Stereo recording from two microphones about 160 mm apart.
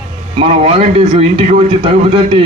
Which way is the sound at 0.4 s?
40° right (ahead or behind).